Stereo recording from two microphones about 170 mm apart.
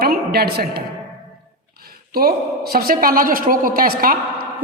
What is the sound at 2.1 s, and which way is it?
A woman's voice, 65° right (ahead or behind).